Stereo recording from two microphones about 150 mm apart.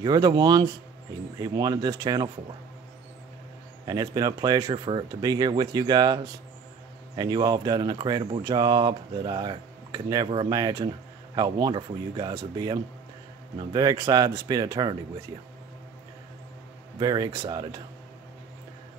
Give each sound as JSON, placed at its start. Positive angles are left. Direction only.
{"t": 0.0, "sound": "speech", "side_deg": -25}
{"t": 3.8, "sound": "speech", "side_deg": -25}
{"t": 17.0, "sound": "speech", "side_deg": -25}